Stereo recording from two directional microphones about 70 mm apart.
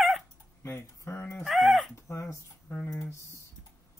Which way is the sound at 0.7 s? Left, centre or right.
Left.